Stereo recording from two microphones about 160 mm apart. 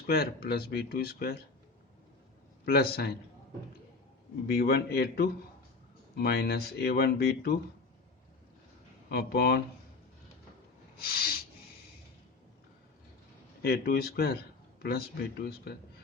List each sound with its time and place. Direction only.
0.1 s speech: 75° left (ahead or behind)
2.6 s a man's voice: 80° left
4.4 s a man's voice: 80° left
9.0 s a man's voice: 80° left
11.0 s speech: 75° left (ahead or behind)
13.6 s a man's voice: 85° left